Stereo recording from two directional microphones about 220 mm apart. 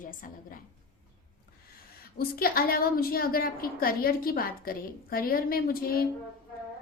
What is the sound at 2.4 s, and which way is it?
A woman's voice, 40° left (ahead or behind).